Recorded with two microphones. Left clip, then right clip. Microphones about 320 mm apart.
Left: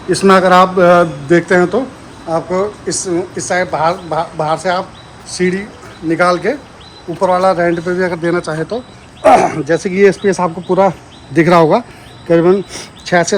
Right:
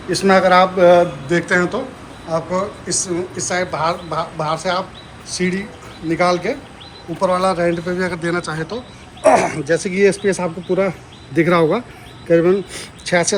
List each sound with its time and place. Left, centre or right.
0.1 s speech: left
8.1 s speech: centre
9.2 s speech: left